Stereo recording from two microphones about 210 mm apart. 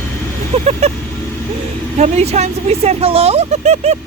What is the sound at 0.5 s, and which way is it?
Speech, 30° right (ahead or behind).